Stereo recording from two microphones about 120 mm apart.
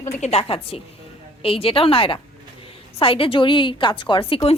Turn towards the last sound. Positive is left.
turn(degrees=50)  # may be behind; listen again after turning